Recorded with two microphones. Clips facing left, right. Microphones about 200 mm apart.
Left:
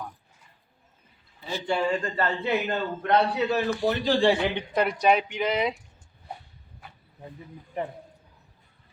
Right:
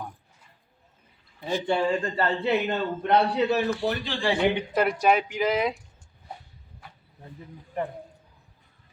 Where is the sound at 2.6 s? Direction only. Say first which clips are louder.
Right 1 dB; 5° right (ahead or behind).